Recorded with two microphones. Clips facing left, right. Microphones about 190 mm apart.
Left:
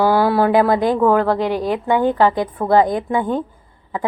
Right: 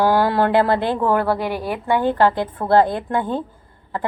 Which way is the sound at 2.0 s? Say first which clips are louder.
Even; 15° left (ahead or behind).